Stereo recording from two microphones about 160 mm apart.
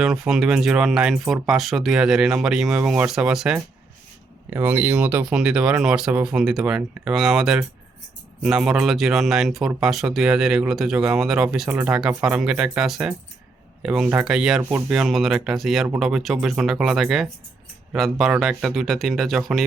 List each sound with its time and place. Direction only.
0.0 s speech: 5° right (ahead or behind)